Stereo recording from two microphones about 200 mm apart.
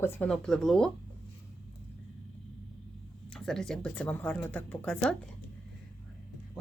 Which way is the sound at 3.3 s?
Centre (ahead or behind).